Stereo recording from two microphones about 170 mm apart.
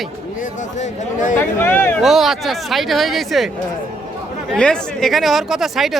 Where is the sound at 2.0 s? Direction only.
Centre (ahead or behind).